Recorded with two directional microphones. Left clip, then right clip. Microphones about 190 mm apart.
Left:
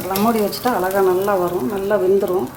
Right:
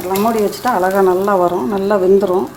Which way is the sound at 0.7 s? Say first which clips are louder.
Right 4 dB; 40° right (ahead or behind).